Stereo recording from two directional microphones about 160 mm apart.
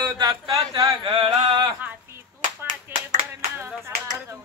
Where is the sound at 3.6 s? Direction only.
15° right (ahead or behind).